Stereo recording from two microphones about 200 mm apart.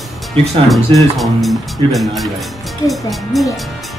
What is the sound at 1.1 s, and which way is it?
Speech, centre (ahead or behind).